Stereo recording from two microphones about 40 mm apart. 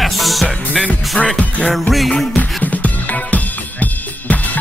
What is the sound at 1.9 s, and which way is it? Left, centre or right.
Speech, centre.